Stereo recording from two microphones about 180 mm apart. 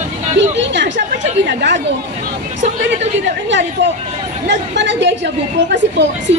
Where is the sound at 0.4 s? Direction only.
85° right.